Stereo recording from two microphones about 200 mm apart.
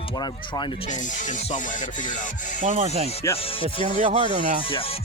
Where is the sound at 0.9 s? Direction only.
40° left (ahead or behind).